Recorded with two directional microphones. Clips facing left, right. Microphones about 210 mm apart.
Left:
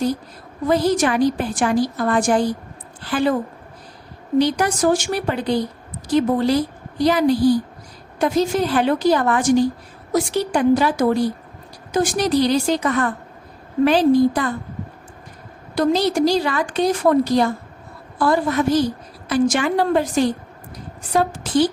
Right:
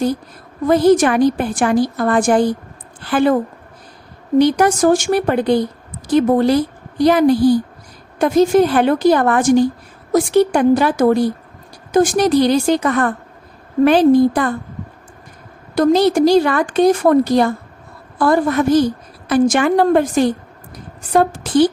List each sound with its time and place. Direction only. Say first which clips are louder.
0.7 s a woman's voice: right 6 dB; 50° right (ahead or behind)
4.4 s a woman's voice: right 5 dB; 50° right (ahead or behind)
15.7 s a woman's voice: right 5 dB; 50° right (ahead or behind)